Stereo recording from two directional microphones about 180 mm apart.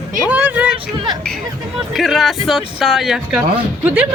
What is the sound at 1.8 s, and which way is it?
Speech, centre (ahead or behind).